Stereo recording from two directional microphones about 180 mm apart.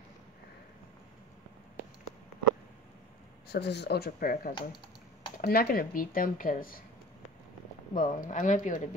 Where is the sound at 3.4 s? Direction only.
70° left (ahead or behind); by 6.8 s 50° left (ahead or behind).